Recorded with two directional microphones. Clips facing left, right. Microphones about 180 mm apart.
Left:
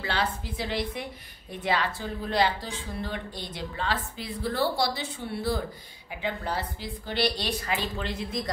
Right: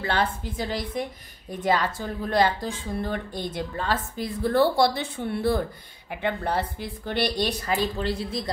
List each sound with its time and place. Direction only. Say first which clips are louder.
0.0 s speech: right 4 dB; 50° right (ahead or behind); by 8.5 s 35° right (ahead or behind)